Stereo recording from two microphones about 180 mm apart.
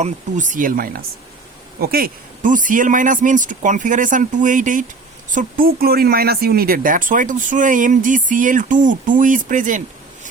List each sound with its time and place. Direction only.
0.0 s speech: 45° right (ahead or behind)